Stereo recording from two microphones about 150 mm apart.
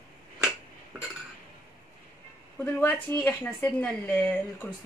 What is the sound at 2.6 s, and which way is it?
Speech, 15° left (ahead or behind).